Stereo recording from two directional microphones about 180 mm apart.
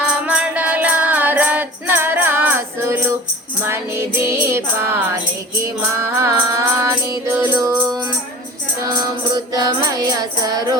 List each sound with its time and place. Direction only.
0.0 s music: 5° right (ahead or behind)